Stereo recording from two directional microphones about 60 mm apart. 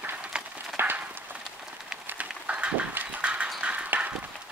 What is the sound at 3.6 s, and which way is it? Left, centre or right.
Clip-clop, right.